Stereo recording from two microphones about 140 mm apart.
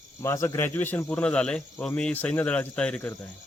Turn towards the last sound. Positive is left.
turn(degrees=10)  # may be behind; listen again after turning